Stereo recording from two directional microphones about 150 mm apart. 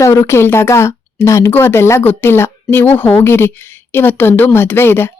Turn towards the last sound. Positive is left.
turn(degrees=15)  # may be behind; listen again after turning